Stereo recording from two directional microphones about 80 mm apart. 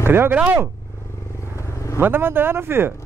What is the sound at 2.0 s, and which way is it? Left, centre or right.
Speech, right.